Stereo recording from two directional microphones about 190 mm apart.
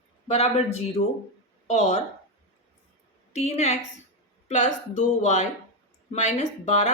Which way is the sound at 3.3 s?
35° left (ahead or behind).